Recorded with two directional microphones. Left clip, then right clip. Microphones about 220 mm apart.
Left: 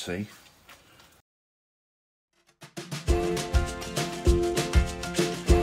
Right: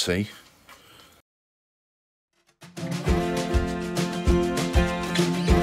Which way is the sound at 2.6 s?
Centre (ahead or behind).